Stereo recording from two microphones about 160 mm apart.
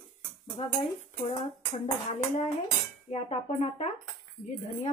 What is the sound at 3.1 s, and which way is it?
Speech, 40° left (ahead or behind).